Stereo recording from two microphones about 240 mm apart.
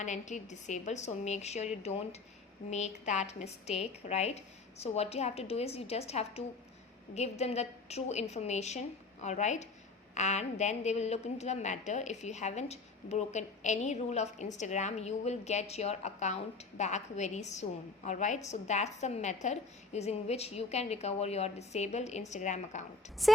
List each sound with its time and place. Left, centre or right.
0.0 s a woman's voice: left
23.2 s speech: centre